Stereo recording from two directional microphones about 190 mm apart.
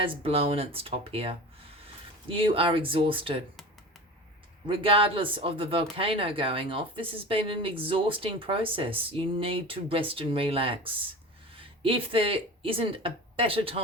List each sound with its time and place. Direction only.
0.0 s speech: 30° right (ahead or behind)
4.7 s speech: 30° right (ahead or behind)